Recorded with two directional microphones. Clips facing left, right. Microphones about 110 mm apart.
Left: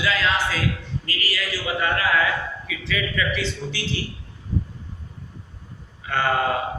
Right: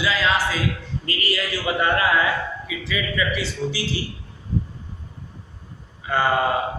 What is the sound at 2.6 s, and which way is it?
A man's voice, 10° right (ahead or behind).